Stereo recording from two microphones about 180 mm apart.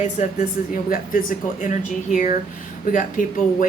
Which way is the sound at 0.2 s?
45° left (ahead or behind).